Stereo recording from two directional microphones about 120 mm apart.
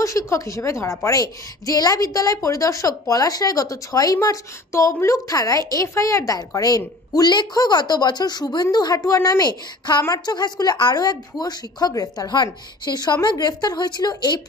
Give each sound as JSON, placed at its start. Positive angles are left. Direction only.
{"t": 0.0, "sound": "a woman's voice", "side_deg": 25}